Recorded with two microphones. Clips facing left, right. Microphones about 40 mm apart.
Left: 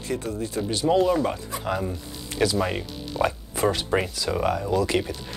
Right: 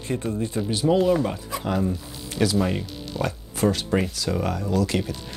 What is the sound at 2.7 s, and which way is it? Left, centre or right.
Speech, centre.